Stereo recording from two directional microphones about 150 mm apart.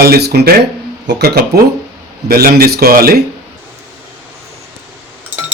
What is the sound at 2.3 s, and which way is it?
Speech, 85° right.